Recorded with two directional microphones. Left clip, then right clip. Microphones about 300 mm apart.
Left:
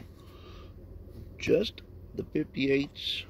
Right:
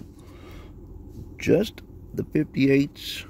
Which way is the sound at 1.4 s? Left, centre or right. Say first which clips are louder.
Right 5 dB; right.